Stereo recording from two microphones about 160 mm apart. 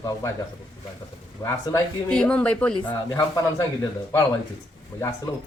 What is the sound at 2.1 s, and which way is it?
Speech, 5° left (ahead or behind).